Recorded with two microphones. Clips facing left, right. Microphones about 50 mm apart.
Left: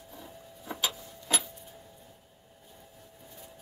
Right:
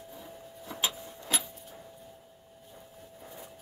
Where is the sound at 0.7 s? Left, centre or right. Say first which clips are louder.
Even; left.